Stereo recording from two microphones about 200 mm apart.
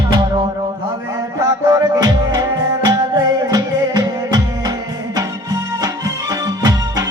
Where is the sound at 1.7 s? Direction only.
20° right (ahead or behind).